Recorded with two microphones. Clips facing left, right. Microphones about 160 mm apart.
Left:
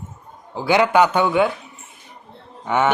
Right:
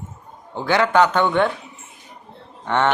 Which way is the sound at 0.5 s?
10° left (ahead or behind).